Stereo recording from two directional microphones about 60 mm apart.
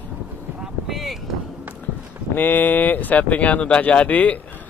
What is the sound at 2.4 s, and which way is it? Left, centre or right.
Speech, left.